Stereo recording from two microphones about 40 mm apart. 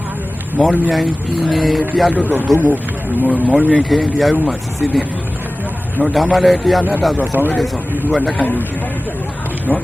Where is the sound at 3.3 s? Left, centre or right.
Right.